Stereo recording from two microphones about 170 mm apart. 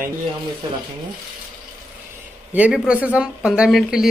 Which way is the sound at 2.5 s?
5° right (ahead or behind).